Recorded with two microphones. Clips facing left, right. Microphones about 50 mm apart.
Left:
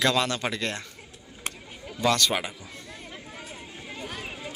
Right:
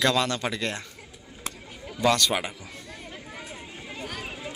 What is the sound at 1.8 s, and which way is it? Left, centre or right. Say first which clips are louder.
Speech: right 1 dB; centre.